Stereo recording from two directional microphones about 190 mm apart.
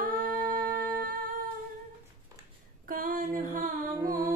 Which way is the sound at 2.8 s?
50° right (ahead or behind).